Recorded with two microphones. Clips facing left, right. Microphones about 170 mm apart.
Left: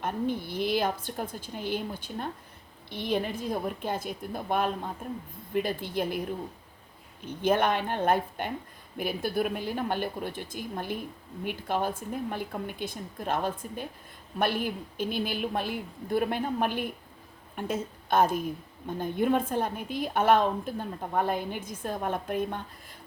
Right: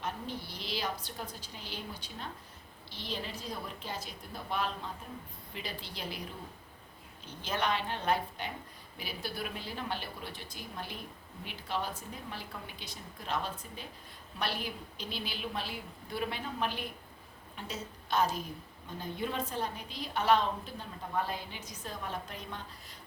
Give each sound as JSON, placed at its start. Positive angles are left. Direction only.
{"t": 0.0, "sound": "a woman's voice", "side_deg": 55}
{"t": 7.3, "sound": "a woman's voice", "side_deg": 55}